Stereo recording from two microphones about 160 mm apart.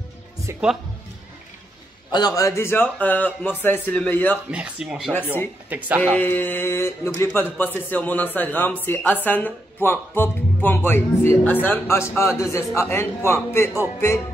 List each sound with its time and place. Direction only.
0.5 s speech: 15° right (ahead or behind)
2.1 s speech: 25° left (ahead or behind)
4.5 s speech: 5° right (ahead or behind)
5.1 s speech: 15° left (ahead or behind)